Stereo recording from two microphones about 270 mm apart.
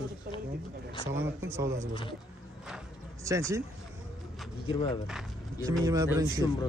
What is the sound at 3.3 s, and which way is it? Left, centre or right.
Speech, centre.